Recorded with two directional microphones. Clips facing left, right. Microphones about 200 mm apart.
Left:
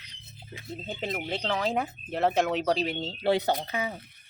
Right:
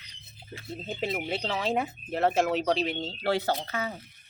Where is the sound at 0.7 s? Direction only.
5° right (ahead or behind).